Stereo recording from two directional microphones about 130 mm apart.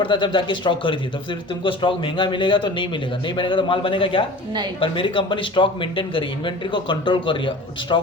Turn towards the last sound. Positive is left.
turn(degrees=40)  # may be behind; listen again after turning